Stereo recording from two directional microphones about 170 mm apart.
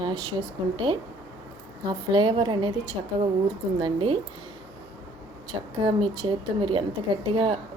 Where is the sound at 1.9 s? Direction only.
30° right (ahead or behind).